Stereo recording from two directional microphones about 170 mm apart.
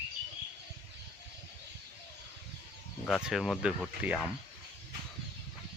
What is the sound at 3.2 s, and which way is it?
Speech, centre (ahead or behind).